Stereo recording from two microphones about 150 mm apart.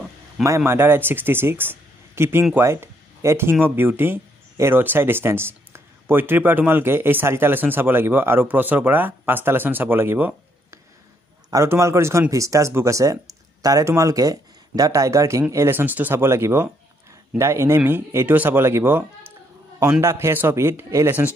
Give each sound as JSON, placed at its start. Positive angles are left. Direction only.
{"t": 0.7, "sound": "speech", "side_deg": -15}